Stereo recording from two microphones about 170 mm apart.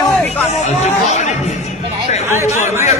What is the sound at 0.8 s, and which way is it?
Speech, 40° left (ahead or behind).